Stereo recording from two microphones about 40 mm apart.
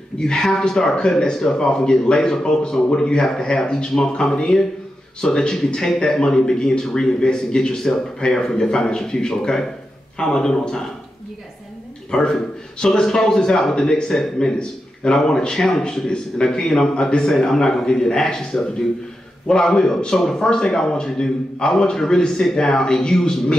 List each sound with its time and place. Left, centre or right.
0.2 s a man's voice: centre
12.1 s a man's voice: centre
17.3 s a man's voice: centre